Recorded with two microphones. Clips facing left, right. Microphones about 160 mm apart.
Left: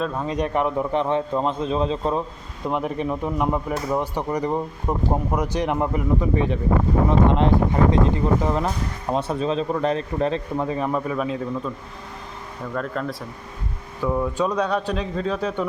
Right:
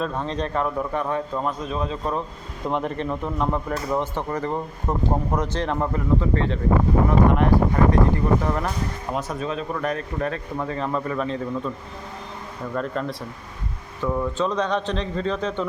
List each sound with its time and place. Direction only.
0.0 s speech: 5° left (ahead or behind); by 2.2 s 25° left (ahead or behind)
2.6 s speech: 5° left (ahead or behind)
12.7 s speech: centre (ahead or behind)